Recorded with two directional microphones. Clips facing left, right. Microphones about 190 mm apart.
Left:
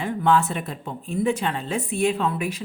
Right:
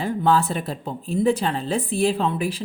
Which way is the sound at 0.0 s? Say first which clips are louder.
Right 1 dB; 35° right (ahead or behind).